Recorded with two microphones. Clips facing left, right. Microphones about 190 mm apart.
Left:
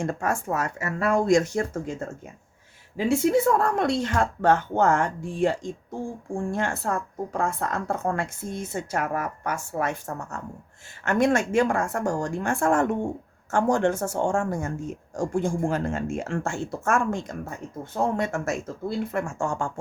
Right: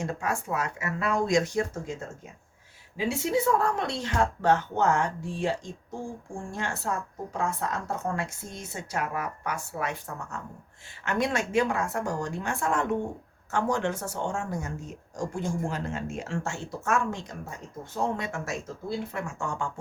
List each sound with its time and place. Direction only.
0.0 s speech: 50° left (ahead or behind)
3.1 s speech: 50° left (ahead or behind)